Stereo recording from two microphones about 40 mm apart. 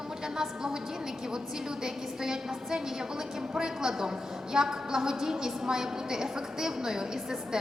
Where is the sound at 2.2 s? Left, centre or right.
Centre.